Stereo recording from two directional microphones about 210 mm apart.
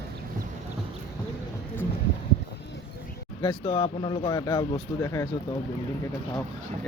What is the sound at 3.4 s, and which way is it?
Speech, 20° left (ahead or behind).